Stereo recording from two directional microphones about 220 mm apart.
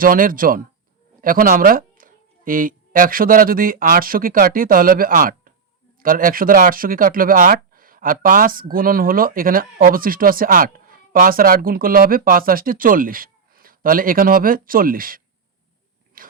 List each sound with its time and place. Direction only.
0.0 s speech: 40° right (ahead or behind)
16.2 s biting: 40° right (ahead or behind)